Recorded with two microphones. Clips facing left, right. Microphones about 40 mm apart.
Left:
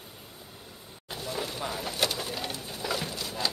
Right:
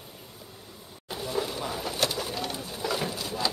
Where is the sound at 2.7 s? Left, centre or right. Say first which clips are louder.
Right 2 dB; centre.